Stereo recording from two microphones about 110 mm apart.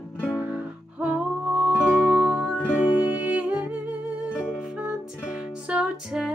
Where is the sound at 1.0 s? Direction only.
10° right (ahead or behind).